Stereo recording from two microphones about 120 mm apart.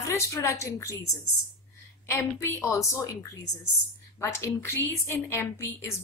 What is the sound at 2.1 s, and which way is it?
A woman's voice, 20° left (ahead or behind).